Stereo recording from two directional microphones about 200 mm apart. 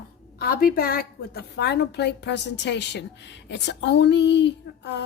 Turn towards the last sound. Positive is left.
turn(degrees=60)  # may be behind; listen again after turning